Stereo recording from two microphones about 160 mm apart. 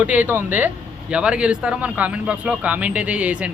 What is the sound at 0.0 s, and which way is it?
Speech, 10° right (ahead or behind).